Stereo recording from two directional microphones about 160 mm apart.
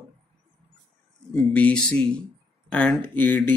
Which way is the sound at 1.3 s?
10° left (ahead or behind).